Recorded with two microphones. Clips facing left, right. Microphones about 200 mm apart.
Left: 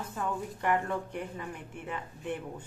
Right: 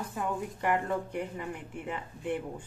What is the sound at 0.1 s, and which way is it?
Speech, 10° right (ahead or behind).